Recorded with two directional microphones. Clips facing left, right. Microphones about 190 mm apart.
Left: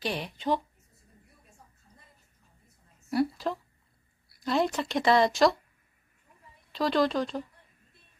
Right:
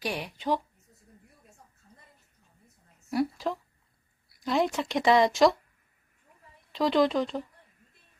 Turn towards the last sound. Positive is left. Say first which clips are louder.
# right 2 dB
turn(degrees=-15)  # may be behind; listen again after turning